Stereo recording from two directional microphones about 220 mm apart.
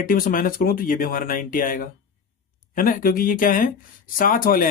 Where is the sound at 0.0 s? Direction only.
40° left (ahead or behind).